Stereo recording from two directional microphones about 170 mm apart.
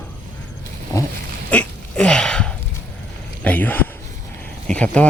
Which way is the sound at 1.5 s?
5° left (ahead or behind).